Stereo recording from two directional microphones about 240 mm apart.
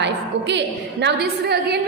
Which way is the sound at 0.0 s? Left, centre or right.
Right.